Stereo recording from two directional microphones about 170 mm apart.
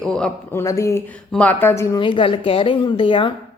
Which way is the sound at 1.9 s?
30° left (ahead or behind).